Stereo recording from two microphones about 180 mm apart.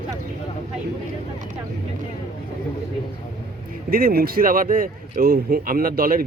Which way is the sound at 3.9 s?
55° right (ahead or behind).